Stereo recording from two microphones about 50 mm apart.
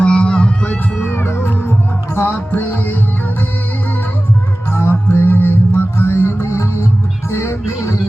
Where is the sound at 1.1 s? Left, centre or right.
Left.